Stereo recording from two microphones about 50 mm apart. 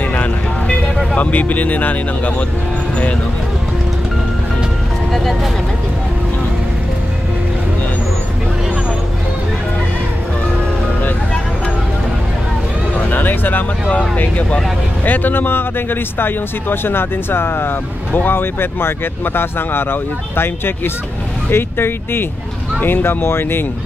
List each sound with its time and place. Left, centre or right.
0.1 s vehicle: left
1.1 s speech: left
5.1 s speech: centre
12.9 s a sound: left
13.8 s speech: left
15.0 s speech: left